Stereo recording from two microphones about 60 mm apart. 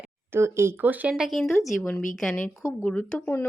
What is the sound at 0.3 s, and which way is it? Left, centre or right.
Speech, right.